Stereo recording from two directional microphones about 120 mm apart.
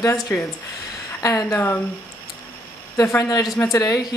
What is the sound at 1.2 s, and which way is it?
Speech, 25° left (ahead or behind).